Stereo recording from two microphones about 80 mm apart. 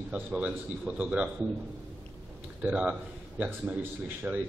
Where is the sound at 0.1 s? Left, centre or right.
Centre.